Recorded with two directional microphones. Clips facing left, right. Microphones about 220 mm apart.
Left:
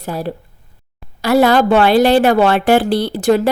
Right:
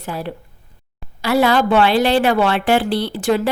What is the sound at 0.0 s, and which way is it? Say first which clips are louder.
A woman's voice: left 4 dB; 40° left (ahead or behind).